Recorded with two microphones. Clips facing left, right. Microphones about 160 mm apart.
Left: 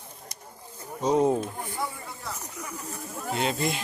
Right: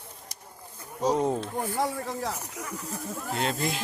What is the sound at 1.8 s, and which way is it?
Speech, 80° right.